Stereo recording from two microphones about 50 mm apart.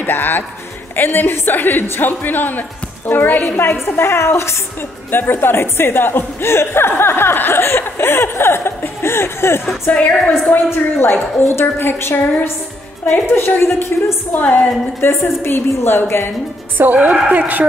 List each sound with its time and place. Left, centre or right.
0.0 s a woman's voice: left
5.1 s speech: left
9.9 s a woman's voice: left
10.5 s speech: left
14.3 s a woman's voice: left
15.0 s speech: left
16.7 s a woman's voice: right